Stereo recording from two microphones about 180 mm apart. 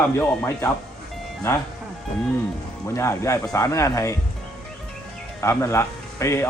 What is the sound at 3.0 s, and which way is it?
Speech, 15° left (ahead or behind).